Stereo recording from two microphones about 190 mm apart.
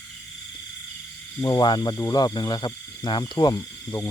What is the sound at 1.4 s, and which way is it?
Speech, 20° left (ahead or behind).